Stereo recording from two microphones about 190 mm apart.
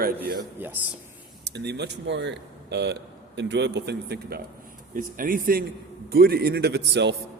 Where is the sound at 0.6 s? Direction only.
10° right (ahead or behind).